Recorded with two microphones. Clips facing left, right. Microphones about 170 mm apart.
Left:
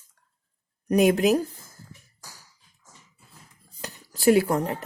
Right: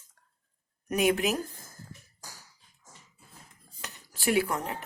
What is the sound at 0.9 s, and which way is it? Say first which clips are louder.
Speech: left 7 dB; 40° left (ahead or behind).